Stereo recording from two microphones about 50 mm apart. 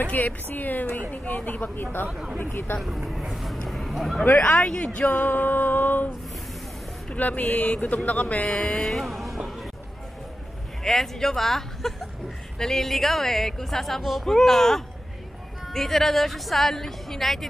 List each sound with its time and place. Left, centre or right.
0.0 s speech: left
2.8 s speech: centre
3.6 s a sound: centre
4.4 s speech: left
7.2 s speech: left
8.5 s a woman's voice: centre
9.0 s music: centre
10.8 s a woman's voice: centre